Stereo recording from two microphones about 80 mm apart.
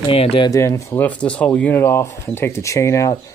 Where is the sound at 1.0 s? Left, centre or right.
Centre.